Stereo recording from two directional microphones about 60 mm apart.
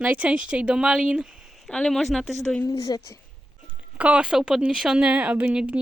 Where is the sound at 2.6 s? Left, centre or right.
Left.